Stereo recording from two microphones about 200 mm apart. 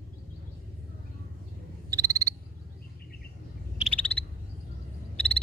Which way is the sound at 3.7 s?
5° left (ahead or behind).